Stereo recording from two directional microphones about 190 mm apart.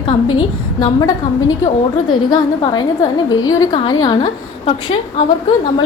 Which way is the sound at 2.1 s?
25° left (ahead or behind).